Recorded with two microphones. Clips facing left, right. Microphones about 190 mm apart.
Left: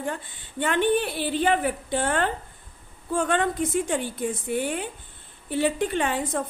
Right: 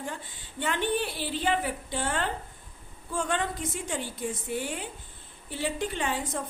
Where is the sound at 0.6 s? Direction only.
55° left (ahead or behind).